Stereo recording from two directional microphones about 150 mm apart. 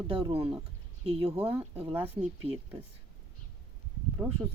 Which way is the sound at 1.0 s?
40° right (ahead or behind).